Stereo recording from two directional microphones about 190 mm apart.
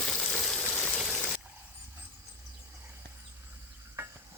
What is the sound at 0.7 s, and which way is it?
Stream, centre (ahead or behind).